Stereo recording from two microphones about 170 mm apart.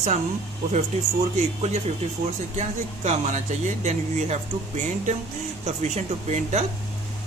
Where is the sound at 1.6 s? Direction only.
40° right (ahead or behind).